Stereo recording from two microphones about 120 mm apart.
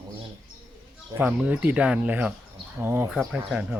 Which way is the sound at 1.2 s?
10° right (ahead or behind).